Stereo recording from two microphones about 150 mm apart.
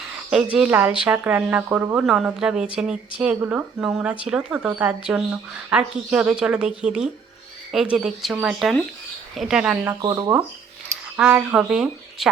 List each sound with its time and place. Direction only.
0.5 s a woman's voice: 10° right (ahead or behind)
10.0 s speech: 25° right (ahead or behind)
11.2 s speech: 10° right (ahead or behind)